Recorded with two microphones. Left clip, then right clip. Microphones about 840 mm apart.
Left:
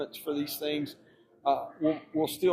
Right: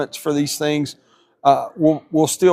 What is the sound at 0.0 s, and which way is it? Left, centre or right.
Speech, right.